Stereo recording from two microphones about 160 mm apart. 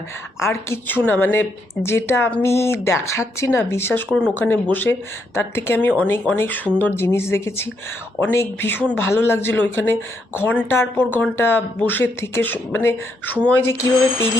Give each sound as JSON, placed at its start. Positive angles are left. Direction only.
{"t": 0.3, "sound": "speech", "side_deg": 15}